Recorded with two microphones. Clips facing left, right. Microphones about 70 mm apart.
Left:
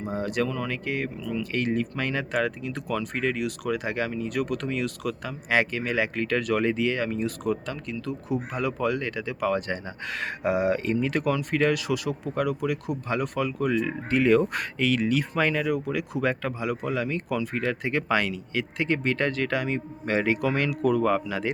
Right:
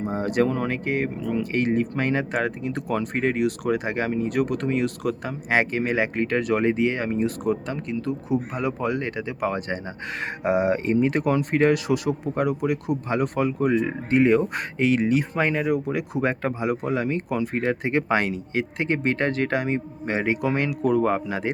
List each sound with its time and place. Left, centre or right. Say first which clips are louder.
0.1 s speech: right 4 dB; right